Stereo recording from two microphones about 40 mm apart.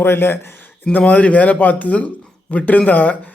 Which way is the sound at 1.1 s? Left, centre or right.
Left.